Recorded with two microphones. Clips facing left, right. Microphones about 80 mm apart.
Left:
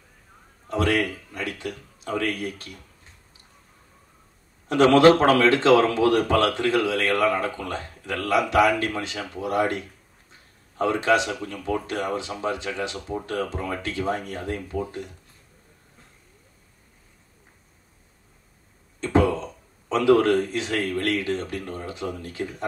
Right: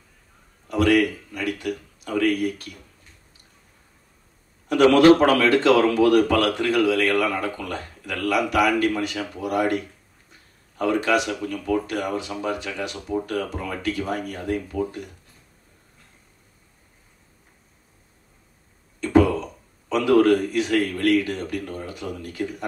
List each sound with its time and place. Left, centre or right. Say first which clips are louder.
0.7 s speech: right 4 dB; left
4.6 s speech: right 1 dB; left
10.8 s speech: even; left
18.9 s speech: right 3 dB; left